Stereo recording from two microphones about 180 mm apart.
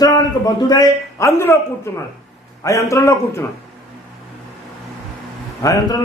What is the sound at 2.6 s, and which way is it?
Speech, 15° left (ahead or behind).